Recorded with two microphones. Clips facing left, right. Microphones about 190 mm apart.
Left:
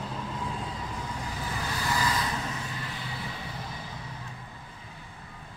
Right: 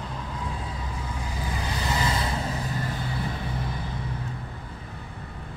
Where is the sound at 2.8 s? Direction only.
45° right (ahead or behind).